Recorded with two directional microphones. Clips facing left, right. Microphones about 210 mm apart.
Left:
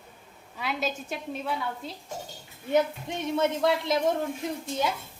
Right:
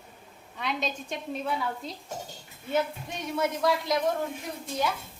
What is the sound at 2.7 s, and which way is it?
A woman's voice, 20° left (ahead or behind).